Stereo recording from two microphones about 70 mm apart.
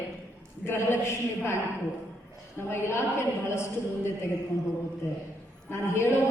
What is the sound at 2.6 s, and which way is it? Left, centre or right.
A woman's voice, left.